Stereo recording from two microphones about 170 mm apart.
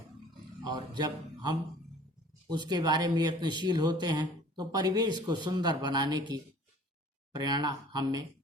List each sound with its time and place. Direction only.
0.6 s speech: 25° right (ahead or behind)